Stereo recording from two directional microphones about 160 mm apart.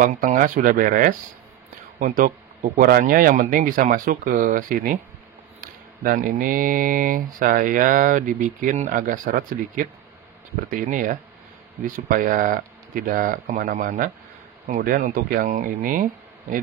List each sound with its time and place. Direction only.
0.0 s speech: 55° right (ahead or behind)